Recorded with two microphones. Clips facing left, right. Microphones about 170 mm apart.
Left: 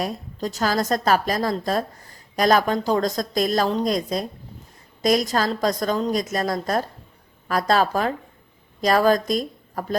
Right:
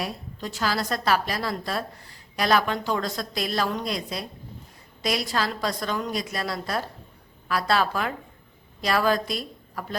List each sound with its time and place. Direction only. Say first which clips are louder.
0.0 s a woman's voice: left 5 dB; 40° left (ahead or behind)